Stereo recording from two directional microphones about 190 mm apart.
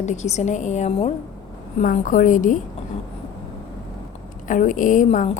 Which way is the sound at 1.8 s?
45° left (ahead or behind).